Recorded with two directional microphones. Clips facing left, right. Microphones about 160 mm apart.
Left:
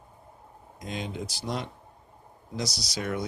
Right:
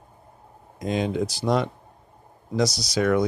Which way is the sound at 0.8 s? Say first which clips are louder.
Right 10 dB; 90° right.